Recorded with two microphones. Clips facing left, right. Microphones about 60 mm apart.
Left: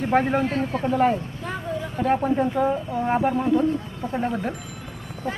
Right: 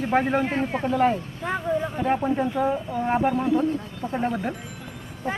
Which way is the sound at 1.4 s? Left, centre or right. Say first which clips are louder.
Right 4 dB; right.